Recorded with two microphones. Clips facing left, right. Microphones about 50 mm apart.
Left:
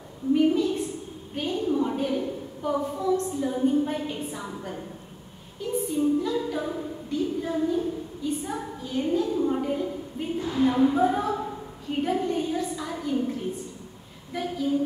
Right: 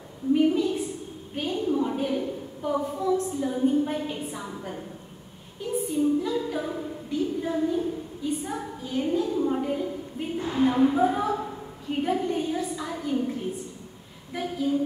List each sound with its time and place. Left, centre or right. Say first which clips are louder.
0.5 s a sound: left 1 dB; centre
3.0 s a woman's voice: even; centre
10.4 s a woman's voice: even; right
10.8 s a woman's voice: even; centre